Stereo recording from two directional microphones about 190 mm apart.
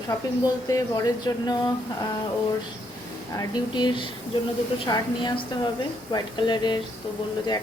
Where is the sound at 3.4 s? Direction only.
25° left (ahead or behind).